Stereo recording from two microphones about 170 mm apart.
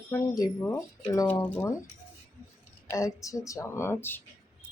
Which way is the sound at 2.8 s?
20° left (ahead or behind).